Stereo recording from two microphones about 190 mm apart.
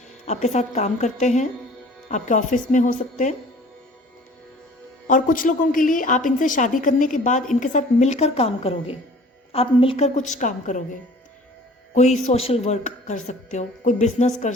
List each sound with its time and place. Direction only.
0.3 s a woman's voice: 35° left (ahead or behind)
5.0 s a woman's voice: 45° left (ahead or behind)
11.9 s a woman's voice: 35° left (ahead or behind)